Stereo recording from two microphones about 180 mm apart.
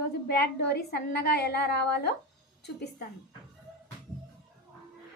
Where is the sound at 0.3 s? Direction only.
65° left (ahead or behind).